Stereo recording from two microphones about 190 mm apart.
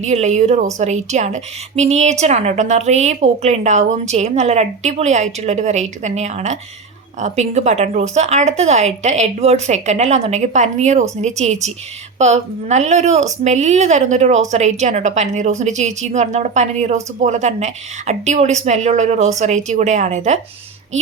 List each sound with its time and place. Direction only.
0.0 s a woman's voice: 35° right (ahead or behind)